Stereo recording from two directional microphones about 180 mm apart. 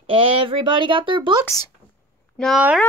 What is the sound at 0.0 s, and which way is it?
Speech, 30° right (ahead or behind).